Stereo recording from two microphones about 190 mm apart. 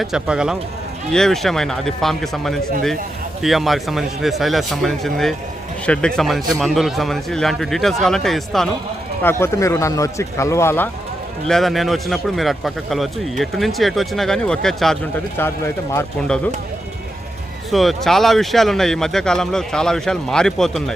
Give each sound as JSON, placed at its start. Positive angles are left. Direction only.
{"t": 0.0, "sound": "speech", "side_deg": -5}
{"t": 9.2, "sound": "speech", "side_deg": 15}
{"t": 11.4, "sound": "speech", "side_deg": 0}
{"t": 15.4, "sound": "speech", "side_deg": 10}
{"t": 17.7, "sound": "speech", "side_deg": 0}